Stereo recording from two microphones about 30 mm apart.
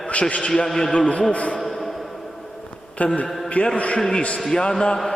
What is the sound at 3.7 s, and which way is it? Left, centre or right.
Speech, left.